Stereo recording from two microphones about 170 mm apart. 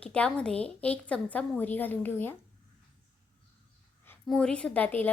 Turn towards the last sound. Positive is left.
turn(degrees=10)  # may be behind; listen again after turning